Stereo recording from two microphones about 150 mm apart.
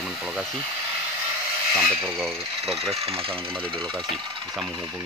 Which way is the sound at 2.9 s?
40° right (ahead or behind).